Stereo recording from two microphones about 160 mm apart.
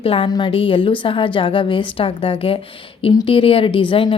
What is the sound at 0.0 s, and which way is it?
A woman's voice, 35° left (ahead or behind).